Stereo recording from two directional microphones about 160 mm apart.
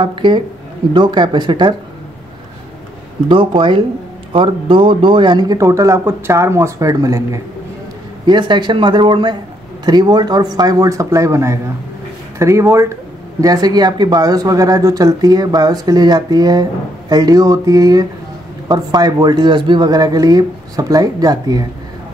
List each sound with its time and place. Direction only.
0.0 s speech: 30° right (ahead or behind)
3.3 s speech: 30° right (ahead or behind)